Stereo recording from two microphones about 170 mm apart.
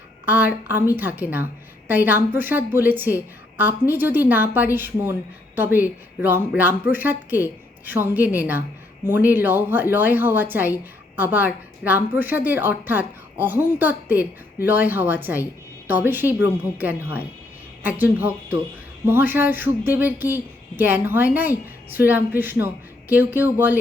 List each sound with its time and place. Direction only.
0.3 s a woman's voice: 10° right (ahead or behind)